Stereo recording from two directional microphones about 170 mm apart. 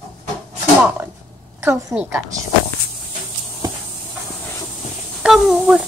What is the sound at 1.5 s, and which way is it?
Speech, 15° right (ahead or behind).